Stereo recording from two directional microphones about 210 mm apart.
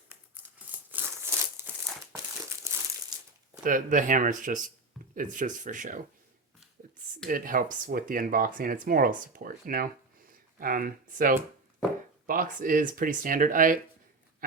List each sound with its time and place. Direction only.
0.9 s a sound: 10° right (ahead or behind)
3.6 s speech: 40° right (ahead or behind)
7.3 s speech: 40° right (ahead or behind)